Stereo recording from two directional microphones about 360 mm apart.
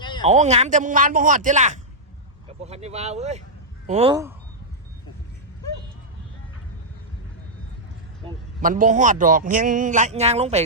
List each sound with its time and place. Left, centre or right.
0.3 s a man's voice: centre
8.6 s a man's voice: right